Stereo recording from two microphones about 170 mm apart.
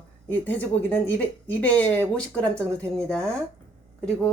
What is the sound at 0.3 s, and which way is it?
A woman's voice, 10° left (ahead or behind).